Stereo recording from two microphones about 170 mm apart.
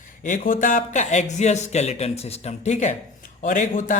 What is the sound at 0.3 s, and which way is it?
Speech, 50° left (ahead or behind).